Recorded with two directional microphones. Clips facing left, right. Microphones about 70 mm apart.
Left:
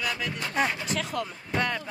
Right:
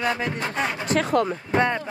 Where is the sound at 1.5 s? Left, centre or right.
Right.